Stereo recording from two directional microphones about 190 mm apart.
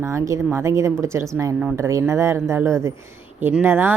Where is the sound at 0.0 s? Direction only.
15° right (ahead or behind).